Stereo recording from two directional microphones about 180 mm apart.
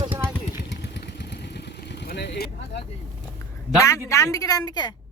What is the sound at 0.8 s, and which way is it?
Vehicle, 70° left (ahead or behind).